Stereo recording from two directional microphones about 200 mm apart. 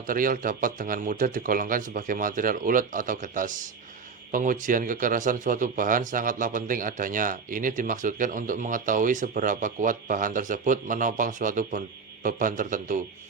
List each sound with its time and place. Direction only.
0.1 s speech: 45° right (ahead or behind)